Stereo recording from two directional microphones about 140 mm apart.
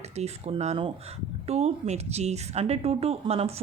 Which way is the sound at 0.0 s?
50° right (ahead or behind).